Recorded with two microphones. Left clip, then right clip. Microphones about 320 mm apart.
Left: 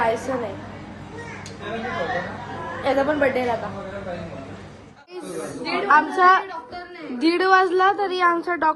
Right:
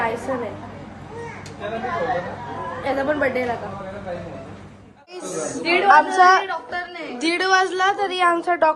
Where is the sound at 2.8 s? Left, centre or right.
Centre.